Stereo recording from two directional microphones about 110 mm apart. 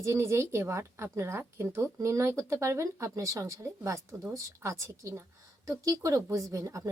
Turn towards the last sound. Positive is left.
turn(degrees=-30)  # may be behind; listen again after turning